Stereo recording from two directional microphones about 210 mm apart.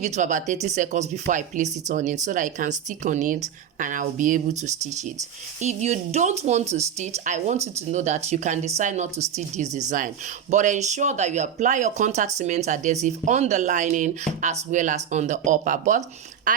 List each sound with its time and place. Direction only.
0.0 s speech: 35° right (ahead or behind)
16.5 s duck: 40° right (ahead or behind)